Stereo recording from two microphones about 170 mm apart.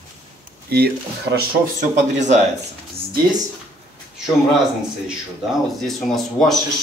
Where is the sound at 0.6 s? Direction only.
70° right (ahead or behind).